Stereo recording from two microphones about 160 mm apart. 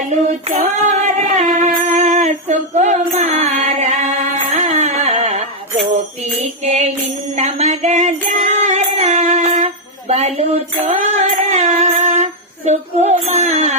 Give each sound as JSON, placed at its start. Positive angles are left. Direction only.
{"t": 0.3, "sound": "female singing", "side_deg": -50}
{"t": 1.9, "sound": "music", "side_deg": -50}
{"t": 10.8, "sound": "female singing", "side_deg": -50}